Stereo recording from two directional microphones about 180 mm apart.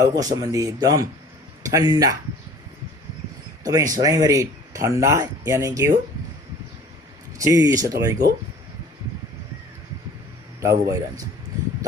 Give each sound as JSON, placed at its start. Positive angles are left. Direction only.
{"t": 0.0, "sound": "speech", "side_deg": -20}
{"t": 3.6, "sound": "speech", "side_deg": -20}
{"t": 7.3, "sound": "speech", "side_deg": -20}
{"t": 10.6, "sound": "speech", "side_deg": -15}